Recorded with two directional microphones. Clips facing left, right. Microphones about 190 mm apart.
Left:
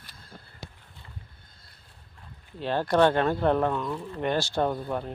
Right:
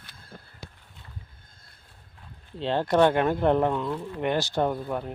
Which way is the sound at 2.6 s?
20° right (ahead or behind).